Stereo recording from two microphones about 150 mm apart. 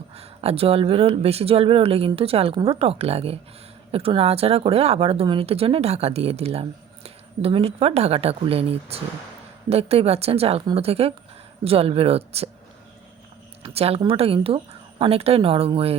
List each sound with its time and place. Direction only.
0.2 s speech: 40° right (ahead or behind)
13.7 s speech: 40° right (ahead or behind)